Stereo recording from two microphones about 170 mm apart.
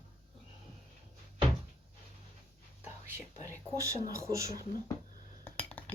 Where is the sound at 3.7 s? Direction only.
20° right (ahead or behind).